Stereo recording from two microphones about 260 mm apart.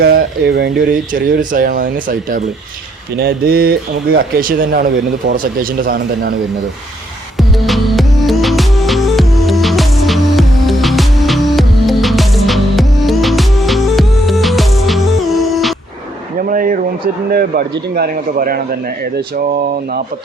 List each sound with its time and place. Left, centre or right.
0.0 s speech: right
7.3 s music: centre
16.5 s a sound: right
17.3 s speech: right
19.7 s speech: right